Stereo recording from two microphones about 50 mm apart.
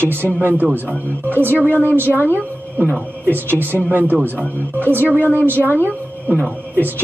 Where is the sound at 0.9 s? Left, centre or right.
Left.